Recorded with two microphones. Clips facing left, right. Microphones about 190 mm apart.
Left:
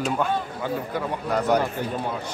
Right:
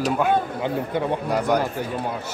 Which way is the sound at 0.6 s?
20° right (ahead or behind).